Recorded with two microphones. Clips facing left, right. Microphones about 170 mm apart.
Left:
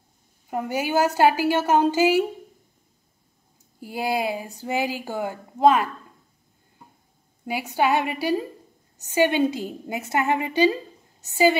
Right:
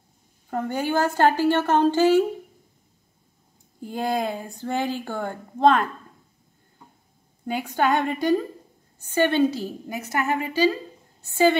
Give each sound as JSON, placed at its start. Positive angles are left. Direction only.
{"t": 0.5, "sound": "a woman's voice", "side_deg": 10}
{"t": 3.8, "sound": "a woman's voice", "side_deg": 5}
{"t": 7.4, "sound": "a woman's voice", "side_deg": 10}